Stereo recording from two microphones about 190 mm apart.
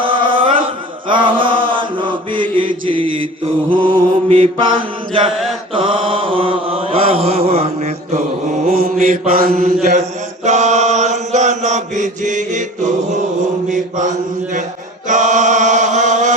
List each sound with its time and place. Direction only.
0.0 s chant: 25° right (ahead or behind)
1.1 s mantra: 25° right (ahead or behind)
3.7 s mantra: 25° right (ahead or behind)
5.2 s mantra: centre (ahead or behind)
5.7 s mantra: 25° right (ahead or behind)
8.6 s mantra: 50° right (ahead or behind)
10.4 s chant: 35° right (ahead or behind)
13.7 s mantra: 40° right (ahead or behind)
15.0 s chant: 40° right (ahead or behind)